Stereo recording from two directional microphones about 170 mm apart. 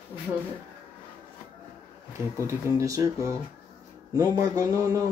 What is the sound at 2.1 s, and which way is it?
Speech, 15° right (ahead or behind).